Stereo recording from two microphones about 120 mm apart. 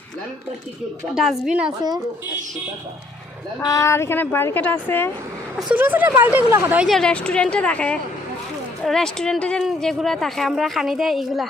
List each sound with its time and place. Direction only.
1.1 s a woman's voice: 5° right (ahead or behind)
3.6 s a woman's voice: 25° left (ahead or behind)
5.7 s speech: 15° right (ahead or behind)
6.8 s a woman's voice: 5° left (ahead or behind)